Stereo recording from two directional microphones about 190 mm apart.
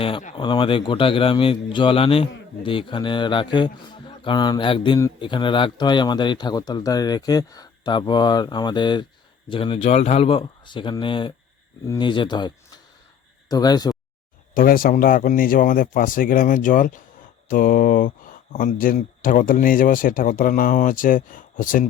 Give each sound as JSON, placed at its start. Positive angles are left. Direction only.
{"t": 0.0, "sound": "speech", "side_deg": 35}
{"t": 14.5, "sound": "speech", "side_deg": 45}